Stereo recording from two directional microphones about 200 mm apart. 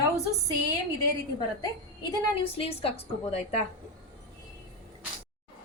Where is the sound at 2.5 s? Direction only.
30° left (ahead or behind).